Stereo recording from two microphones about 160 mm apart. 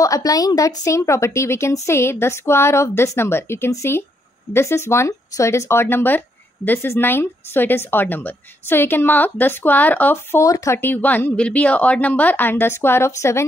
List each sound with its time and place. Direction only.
0.0 s speech: 20° left (ahead or behind)